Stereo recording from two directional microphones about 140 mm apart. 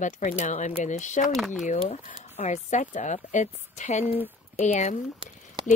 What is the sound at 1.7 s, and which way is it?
Speech, 60° left (ahead or behind).